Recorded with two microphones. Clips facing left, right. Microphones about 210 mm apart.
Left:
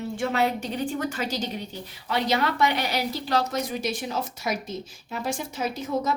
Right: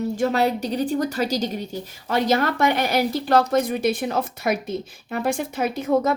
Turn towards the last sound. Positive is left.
turn(degrees=-60)  # may be behind; listen again after turning